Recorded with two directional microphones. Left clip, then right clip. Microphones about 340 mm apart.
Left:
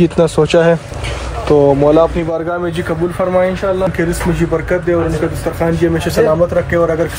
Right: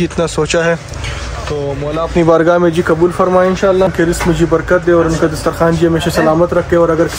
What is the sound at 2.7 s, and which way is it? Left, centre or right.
Speech, centre.